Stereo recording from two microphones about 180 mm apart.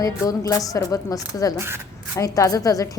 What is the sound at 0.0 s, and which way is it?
A woman's voice, 20° left (ahead or behind).